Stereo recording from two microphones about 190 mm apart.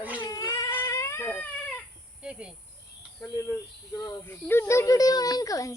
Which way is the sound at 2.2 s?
5° right (ahead or behind).